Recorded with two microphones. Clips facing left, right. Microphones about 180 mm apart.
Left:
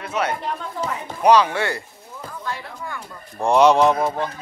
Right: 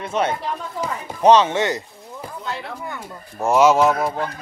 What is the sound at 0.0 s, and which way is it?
Speech, 25° right (ahead or behind).